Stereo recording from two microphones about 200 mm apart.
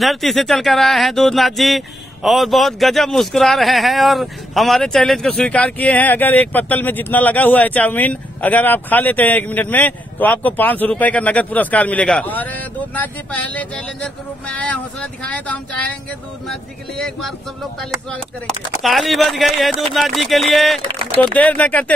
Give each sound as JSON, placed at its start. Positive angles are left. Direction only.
{"t": 0.0, "sound": "a man's voice", "side_deg": 0}
{"t": 18.8, "sound": "a man's voice", "side_deg": 0}